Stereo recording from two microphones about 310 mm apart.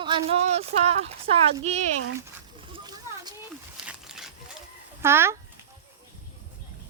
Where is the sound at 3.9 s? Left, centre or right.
Centre.